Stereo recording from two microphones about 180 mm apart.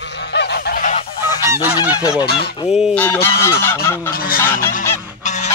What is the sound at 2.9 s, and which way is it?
Goose, 10° left (ahead or behind).